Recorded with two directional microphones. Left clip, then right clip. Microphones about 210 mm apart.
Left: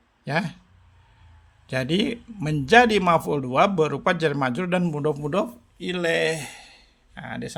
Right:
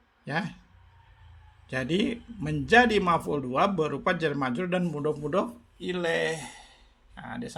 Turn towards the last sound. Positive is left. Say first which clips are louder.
# left 5 dB
turn(degrees=30)  # may be behind; listen again after turning